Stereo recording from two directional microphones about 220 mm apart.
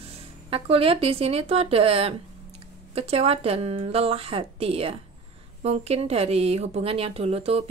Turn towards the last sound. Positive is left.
turn(degrees=-25)  # may be behind; listen again after turning